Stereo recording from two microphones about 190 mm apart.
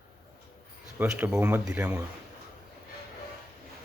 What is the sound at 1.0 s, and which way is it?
Speech, 10° right (ahead or behind).